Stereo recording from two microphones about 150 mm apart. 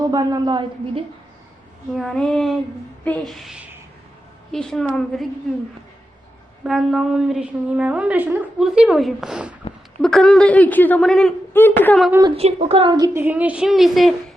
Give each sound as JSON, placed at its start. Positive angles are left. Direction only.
{"t": 0.0, "sound": "a woman's voice", "side_deg": -25}
{"t": 2.0, "sound": "a woman's voice", "side_deg": 5}
{"t": 6.7, "sound": "a woman's voice", "side_deg": 0}
{"t": 11.5, "sound": "speech", "side_deg": 15}
{"t": 12.4, "sound": "speech", "side_deg": -45}
{"t": 13.1, "sound": "a woman's voice", "side_deg": -10}